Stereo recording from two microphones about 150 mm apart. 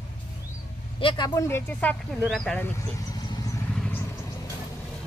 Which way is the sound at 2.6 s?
25° left (ahead or behind).